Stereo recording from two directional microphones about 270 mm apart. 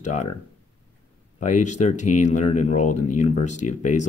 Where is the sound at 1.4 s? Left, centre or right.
Left.